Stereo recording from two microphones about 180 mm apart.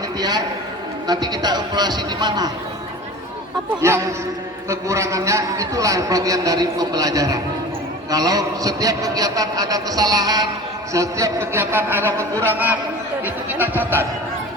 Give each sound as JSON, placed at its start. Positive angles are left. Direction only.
{"t": 0.2, "sound": "a man's voice", "side_deg": -20}
{"t": 4.7, "sound": "a man's voice", "side_deg": -15}